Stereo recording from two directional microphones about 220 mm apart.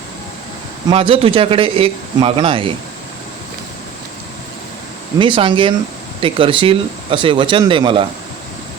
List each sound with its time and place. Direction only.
0.9 s speech: 25° right (ahead or behind)
5.2 s speech: 25° right (ahead or behind)